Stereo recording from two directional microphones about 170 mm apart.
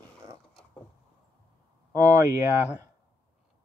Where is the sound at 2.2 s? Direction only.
15° right (ahead or behind).